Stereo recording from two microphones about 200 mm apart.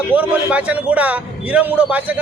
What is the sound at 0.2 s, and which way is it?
A man's voice, 5° right (ahead or behind).